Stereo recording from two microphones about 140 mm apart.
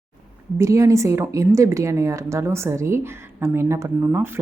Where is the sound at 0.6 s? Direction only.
20° right (ahead or behind).